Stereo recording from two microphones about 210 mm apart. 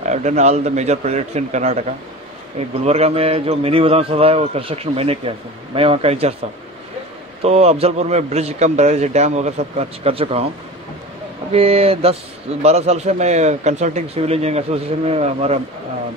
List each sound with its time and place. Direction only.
0.0 s a man's voice: 35° right (ahead or behind)
7.4 s a man's voice: 30° right (ahead or behind)
11.5 s a man's voice: 30° right (ahead or behind)